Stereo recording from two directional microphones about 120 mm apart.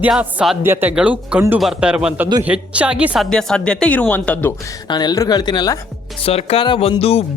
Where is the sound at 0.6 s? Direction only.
20° right (ahead or behind).